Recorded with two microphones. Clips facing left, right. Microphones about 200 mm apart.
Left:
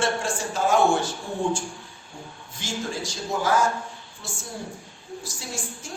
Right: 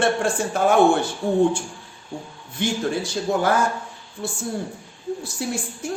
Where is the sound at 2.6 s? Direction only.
60° right (ahead or behind).